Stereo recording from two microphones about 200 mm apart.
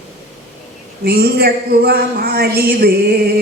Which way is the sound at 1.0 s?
50° right (ahead or behind).